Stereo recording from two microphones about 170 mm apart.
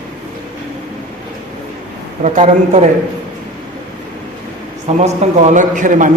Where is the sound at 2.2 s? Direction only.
45° right (ahead or behind).